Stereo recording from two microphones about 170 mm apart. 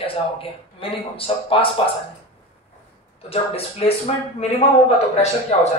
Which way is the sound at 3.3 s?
35° left (ahead or behind).